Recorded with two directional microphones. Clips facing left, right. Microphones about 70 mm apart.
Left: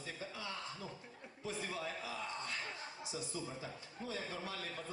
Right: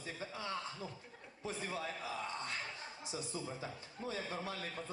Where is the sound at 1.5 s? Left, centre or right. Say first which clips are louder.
Right 1 dB; right.